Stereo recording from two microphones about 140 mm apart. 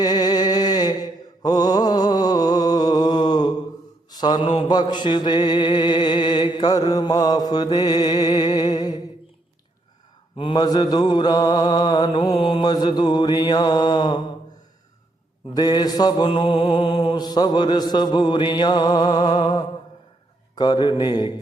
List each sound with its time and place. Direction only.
0.0 s mantra: 30° left (ahead or behind)
10.3 s mantra: 35° left (ahead or behind)
15.5 s mantra: 30° left (ahead or behind)